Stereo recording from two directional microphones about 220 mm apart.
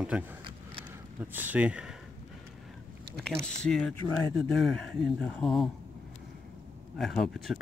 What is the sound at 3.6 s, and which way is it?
Speech, 5° left (ahead or behind).